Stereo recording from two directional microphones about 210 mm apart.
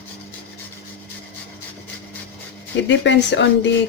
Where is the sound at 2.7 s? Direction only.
60° left (ahead or behind).